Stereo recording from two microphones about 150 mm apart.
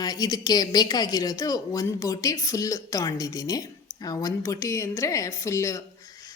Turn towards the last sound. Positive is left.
turn(degrees=20)  # may be behind; listen again after turning